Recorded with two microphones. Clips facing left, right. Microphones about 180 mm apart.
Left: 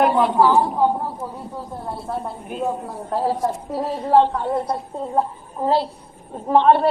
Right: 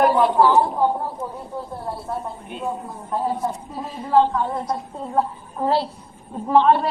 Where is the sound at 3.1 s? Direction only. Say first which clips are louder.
Left 2 dB; 85° left.